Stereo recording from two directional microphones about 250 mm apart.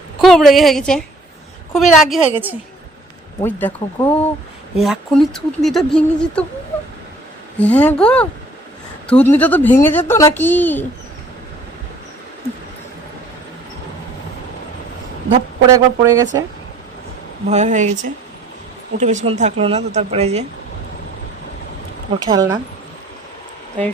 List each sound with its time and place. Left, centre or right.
0.2 s speech: centre
3.4 s a woman's voice: centre
7.6 s a woman's voice: centre
15.7 s speech: centre
17.5 s speech: right
22.1 s speech: centre